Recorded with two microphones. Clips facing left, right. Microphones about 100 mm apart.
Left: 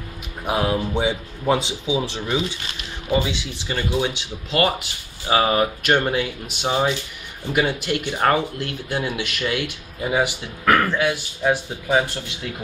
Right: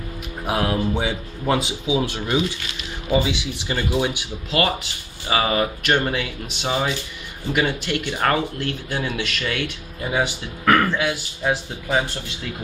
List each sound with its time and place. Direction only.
0.5 s speech: 15° left (ahead or behind)
1.6 s speech: 5° right (ahead or behind)
5.3 s speech: 25° left (ahead or behind)
5.6 s speech: 15° left (ahead or behind)